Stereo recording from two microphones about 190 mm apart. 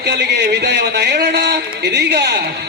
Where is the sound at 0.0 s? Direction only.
60° right (ahead or behind).